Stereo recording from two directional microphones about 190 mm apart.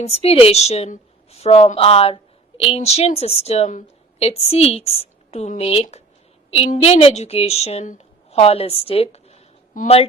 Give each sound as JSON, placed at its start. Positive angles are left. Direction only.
{"t": 0.0, "sound": "a woman's voice", "side_deg": 35}